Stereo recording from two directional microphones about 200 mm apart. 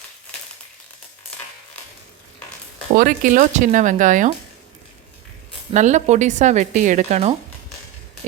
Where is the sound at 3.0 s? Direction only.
40° right (ahead or behind).